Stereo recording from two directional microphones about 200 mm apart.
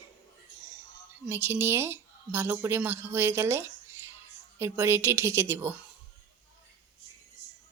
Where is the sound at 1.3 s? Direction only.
10° right (ahead or behind).